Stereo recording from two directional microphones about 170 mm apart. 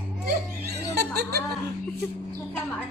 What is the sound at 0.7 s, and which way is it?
Music, 70° right (ahead or behind).